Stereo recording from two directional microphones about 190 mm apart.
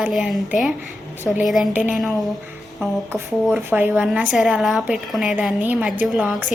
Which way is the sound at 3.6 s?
10° right (ahead or behind).